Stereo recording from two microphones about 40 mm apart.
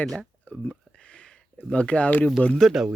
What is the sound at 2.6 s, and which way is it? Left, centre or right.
Speech, centre.